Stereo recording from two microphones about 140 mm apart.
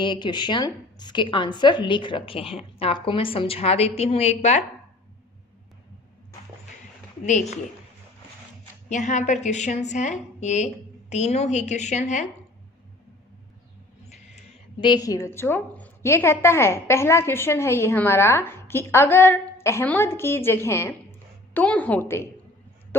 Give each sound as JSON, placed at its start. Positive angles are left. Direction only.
{"t": 0.0, "sound": "a woman's voice", "side_deg": 35}
{"t": 7.3, "sound": "a woman's voice", "side_deg": 55}
{"t": 8.9, "sound": "a woman's voice", "side_deg": 60}
{"t": 14.8, "sound": "a woman's voice", "side_deg": 30}